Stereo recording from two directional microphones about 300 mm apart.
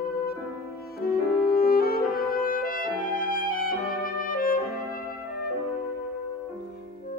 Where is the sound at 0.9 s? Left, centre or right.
Left.